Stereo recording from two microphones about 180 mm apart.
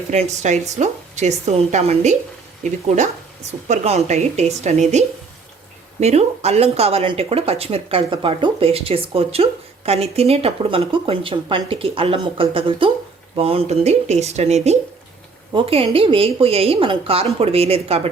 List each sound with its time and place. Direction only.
0.1 s speech: 40° right (ahead or behind)
3.7 s speech: 40° right (ahead or behind)